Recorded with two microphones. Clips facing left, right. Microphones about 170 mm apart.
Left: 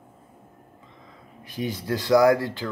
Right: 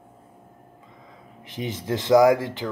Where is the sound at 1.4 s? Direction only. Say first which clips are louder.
Left 1 dB; 20° right (ahead or behind).